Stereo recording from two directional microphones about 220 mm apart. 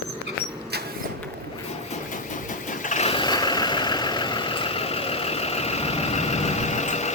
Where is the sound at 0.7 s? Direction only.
45° right (ahead or behind).